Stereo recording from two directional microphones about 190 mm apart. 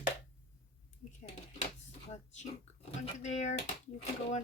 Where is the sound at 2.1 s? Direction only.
35° left (ahead or behind).